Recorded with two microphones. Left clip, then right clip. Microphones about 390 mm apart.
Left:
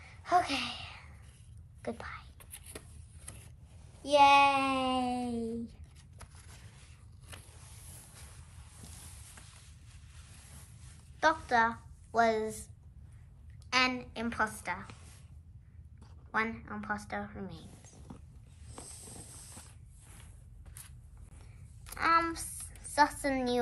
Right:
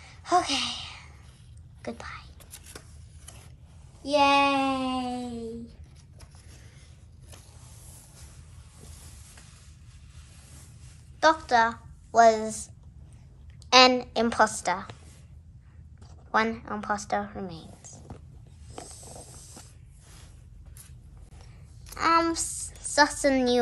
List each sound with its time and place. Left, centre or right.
0.0 s a sound: centre
1.8 s whispering: centre
4.0 s speech: left
11.1 s a woman's voice: centre
16.3 s a woman's voice: centre
21.8 s a woman's voice: centre